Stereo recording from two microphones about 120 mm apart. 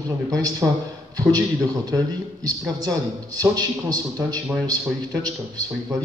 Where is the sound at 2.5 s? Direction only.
30° right (ahead or behind).